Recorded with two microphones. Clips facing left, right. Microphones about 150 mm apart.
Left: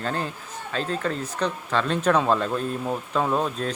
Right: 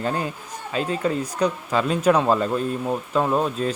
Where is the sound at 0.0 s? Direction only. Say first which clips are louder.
Right 3 dB; 10° right (ahead or behind).